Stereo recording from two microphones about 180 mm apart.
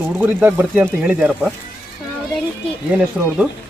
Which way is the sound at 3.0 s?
5° right (ahead or behind).